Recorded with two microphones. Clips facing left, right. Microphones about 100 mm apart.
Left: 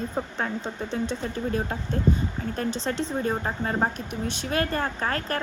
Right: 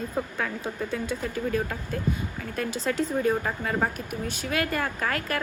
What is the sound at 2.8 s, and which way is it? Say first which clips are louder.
A woman's voice: right 6 dB; 25° left (ahead or behind).